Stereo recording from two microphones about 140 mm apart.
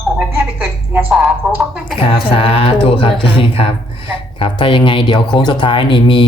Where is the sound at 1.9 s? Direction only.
40° left (ahead or behind).